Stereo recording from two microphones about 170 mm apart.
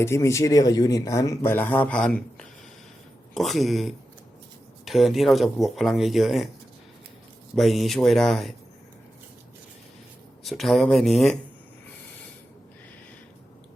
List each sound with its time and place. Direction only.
0.0 s speech: 15° left (ahead or behind); by 6.5 s centre (ahead or behind)
7.5 s speech: centre (ahead or behind)
10.4 s speech: centre (ahead or behind)